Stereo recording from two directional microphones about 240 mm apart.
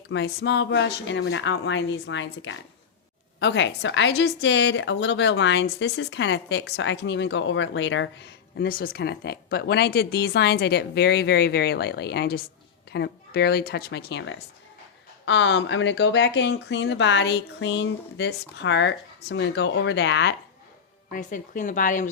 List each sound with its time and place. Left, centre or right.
0.1 s a woman's voice: left
21.1 s a woman's voice: left